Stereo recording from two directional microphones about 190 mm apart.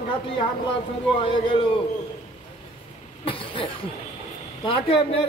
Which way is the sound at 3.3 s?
25° left (ahead or behind).